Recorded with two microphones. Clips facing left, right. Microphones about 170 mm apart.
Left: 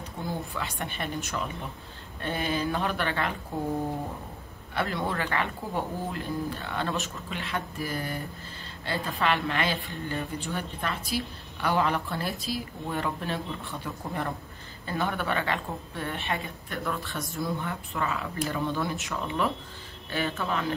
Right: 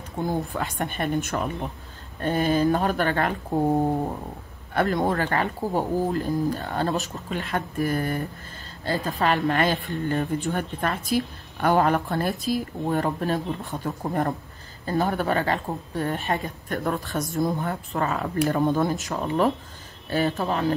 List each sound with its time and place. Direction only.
0.3 s a woman's voice: 45° right (ahead or behind)
1.2 s speech: 55° right (ahead or behind)
2.2 s a woman's voice: 40° right (ahead or behind)
4.7 s a woman's voice: 45° right (ahead or behind)
8.8 s speech: 40° right (ahead or behind)
10.0 s a woman's voice: 55° right (ahead or behind); by 20.6 s 35° right (ahead or behind)